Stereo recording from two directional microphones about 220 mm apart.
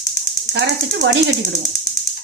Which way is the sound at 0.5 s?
55° right (ahead or behind).